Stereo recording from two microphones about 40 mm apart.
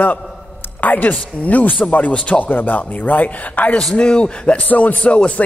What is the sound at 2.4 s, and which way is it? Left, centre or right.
A woman's voice, left.